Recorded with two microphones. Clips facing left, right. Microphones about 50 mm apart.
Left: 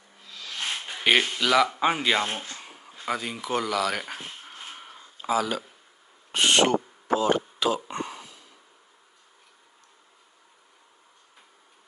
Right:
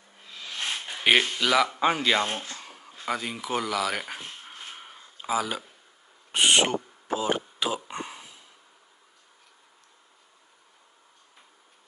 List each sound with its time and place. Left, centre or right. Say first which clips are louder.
0.2 s music: even; right
1.1 s speech: even; centre
2.5 s a sound: even; centre